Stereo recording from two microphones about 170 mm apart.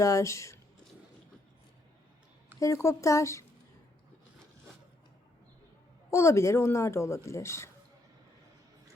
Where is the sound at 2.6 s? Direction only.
15° left (ahead or behind).